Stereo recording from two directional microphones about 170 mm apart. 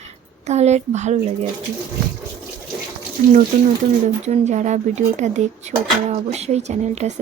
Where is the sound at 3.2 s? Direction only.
50° right (ahead or behind).